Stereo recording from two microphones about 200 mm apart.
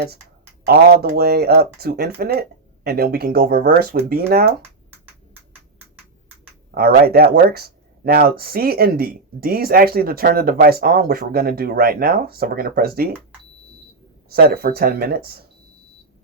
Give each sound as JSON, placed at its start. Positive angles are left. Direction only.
{"t": 0.7, "sound": "speech", "side_deg": -50}
{"t": 6.7, "sound": "speech", "side_deg": -50}
{"t": 14.3, "sound": "speech", "side_deg": -50}